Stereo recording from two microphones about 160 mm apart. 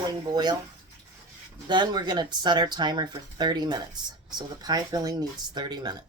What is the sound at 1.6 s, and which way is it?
Speech, 30° right (ahead or behind).